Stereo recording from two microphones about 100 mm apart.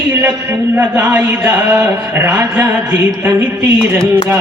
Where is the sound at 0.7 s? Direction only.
20° right (ahead or behind).